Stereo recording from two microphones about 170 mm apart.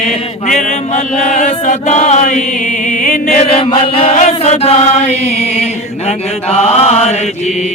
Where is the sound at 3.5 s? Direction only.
35° left (ahead or behind).